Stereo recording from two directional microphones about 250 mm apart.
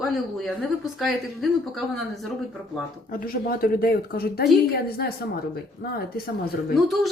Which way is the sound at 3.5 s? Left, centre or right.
Left.